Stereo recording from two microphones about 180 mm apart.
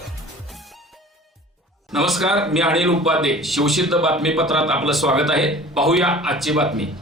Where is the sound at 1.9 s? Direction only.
Centre (ahead or behind).